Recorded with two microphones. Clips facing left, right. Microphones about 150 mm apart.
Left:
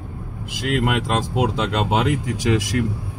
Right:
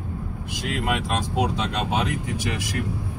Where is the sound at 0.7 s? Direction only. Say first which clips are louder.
Left 5 dB; 90° left.